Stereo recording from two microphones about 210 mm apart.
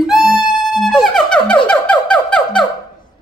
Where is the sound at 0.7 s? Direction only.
Centre (ahead or behind).